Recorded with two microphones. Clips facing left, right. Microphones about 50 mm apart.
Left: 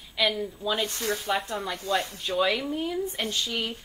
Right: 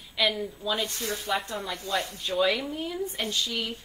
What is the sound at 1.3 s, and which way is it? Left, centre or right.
Speech, left.